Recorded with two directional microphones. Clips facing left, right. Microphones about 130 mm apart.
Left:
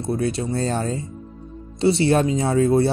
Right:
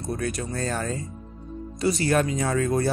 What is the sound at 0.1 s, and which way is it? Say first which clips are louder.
Speech: left 6 dB; 30° left (ahead or behind).